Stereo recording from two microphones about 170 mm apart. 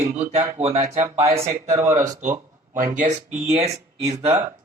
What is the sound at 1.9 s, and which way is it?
Speech, 50° right (ahead or behind).